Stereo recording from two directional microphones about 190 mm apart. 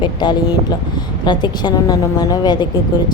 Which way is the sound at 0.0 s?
25° left (ahead or behind).